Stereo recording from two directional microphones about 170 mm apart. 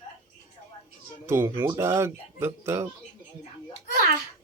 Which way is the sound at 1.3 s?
15° right (ahead or behind).